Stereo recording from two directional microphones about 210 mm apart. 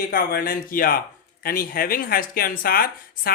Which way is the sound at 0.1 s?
45° left (ahead or behind).